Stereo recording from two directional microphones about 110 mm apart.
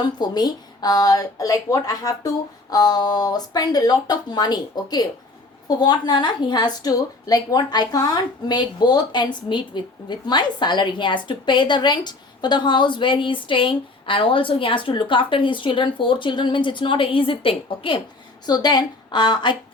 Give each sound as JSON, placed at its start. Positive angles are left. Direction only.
{"t": 0.0, "sound": "a woman's voice", "side_deg": 40}
{"t": 18.4, "sound": "a woman's voice", "side_deg": 40}